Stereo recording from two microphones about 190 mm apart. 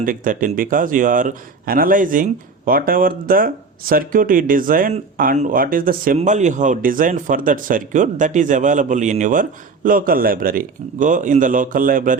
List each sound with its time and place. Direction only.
0.0 s speech: 45° right (ahead or behind)